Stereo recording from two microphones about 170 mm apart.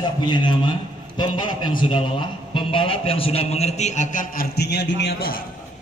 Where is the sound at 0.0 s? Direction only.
25° left (ahead or behind); by 5.4 s 75° left (ahead or behind).